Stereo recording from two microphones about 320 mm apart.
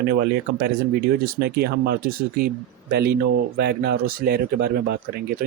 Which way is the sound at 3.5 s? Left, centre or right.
Right.